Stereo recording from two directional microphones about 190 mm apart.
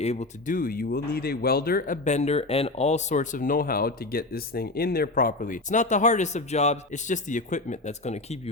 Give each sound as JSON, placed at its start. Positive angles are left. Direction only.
{"t": 0.0, "sound": "speech", "side_deg": 35}